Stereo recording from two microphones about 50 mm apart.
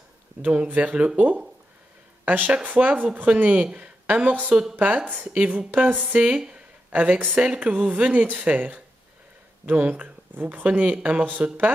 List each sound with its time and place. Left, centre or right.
0.4 s speech: right